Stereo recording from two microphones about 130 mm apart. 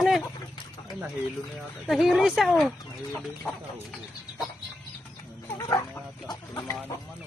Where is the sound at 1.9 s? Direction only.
5° right (ahead or behind).